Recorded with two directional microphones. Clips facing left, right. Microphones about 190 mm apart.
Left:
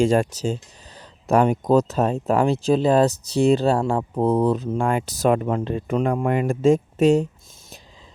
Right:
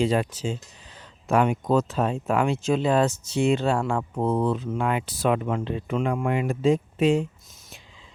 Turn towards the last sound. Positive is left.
turn(degrees=40)  # may be behind; listen again after turning